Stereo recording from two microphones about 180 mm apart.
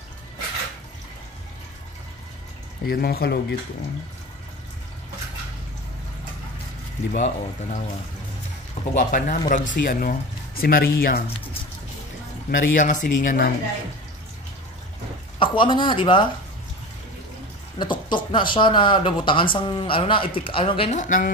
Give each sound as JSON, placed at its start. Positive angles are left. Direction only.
{"t": 2.8, "sound": "speech", "side_deg": 55}
{"t": 7.1, "sound": "speech", "side_deg": 40}
{"t": 8.9, "sound": "speech", "side_deg": 50}
{"t": 12.4, "sound": "speech", "side_deg": 45}
{"t": 15.3, "sound": "speech", "side_deg": 25}
{"t": 17.7, "sound": "speech", "side_deg": 25}